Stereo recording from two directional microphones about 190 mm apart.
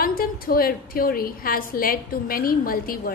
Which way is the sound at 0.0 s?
50° left (ahead or behind).